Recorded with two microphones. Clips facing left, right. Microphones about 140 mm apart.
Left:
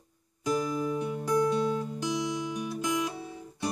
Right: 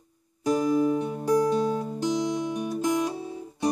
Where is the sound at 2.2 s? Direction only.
55° right (ahead or behind).